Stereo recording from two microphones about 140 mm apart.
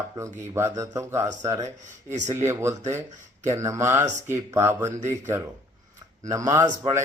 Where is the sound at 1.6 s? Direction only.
60° right (ahead or behind).